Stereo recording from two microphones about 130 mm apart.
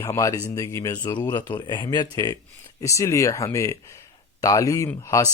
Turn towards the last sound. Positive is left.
turn(degrees=25)  # may be behind; listen again after turning